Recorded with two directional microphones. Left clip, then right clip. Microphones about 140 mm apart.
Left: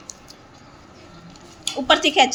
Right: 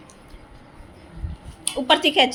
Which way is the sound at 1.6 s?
10° right (ahead or behind).